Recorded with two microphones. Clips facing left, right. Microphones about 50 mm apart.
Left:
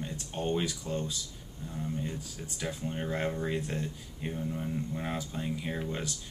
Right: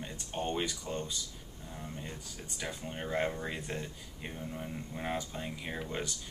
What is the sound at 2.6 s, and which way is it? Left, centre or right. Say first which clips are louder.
Speech: left 4 dB; centre.